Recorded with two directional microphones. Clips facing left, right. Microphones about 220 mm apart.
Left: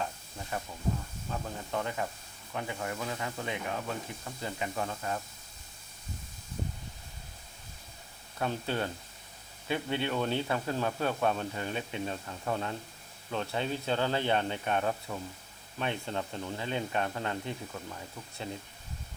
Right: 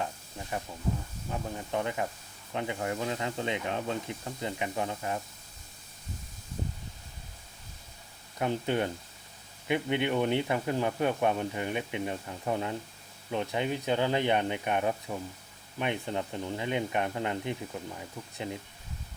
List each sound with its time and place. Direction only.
0.0 s stir: 15° right (ahead or behind)
1.3 s speech: 20° right (ahead or behind)
8.4 s speech: 15° right (ahead or behind)